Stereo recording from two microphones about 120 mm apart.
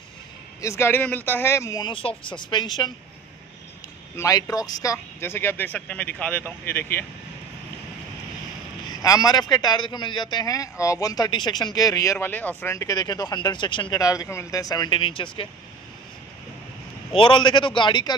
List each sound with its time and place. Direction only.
0.6 s speech: 20° left (ahead or behind)
1.9 s a man's voice: 45° left (ahead or behind)
4.2 s speech: 30° left (ahead or behind)
9.0 s a man's voice: 30° left (ahead or behind); by 12.7 s 15° left (ahead or behind)
12.7 s a man's voice: 30° left (ahead or behind); by 15.4 s 45° left (ahead or behind)
17.1 s a man's voice: 45° left (ahead or behind)